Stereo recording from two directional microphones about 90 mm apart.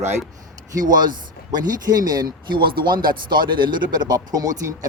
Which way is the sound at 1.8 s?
45° right (ahead or behind).